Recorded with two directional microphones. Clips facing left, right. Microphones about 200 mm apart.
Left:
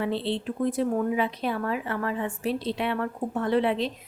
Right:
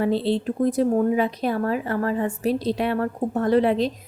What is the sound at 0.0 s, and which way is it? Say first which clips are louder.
A woman's voice: right 6 dB; 40° right (ahead or behind).